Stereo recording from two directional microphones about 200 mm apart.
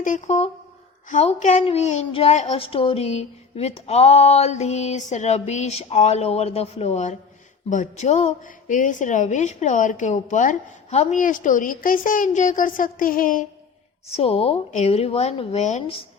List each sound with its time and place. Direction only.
0.0 s a woman's voice: 40° left (ahead or behind)
14.1 s speech: 30° left (ahead or behind)